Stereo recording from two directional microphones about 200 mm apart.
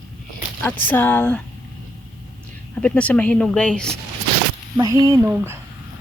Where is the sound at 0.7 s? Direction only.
10° left (ahead or behind).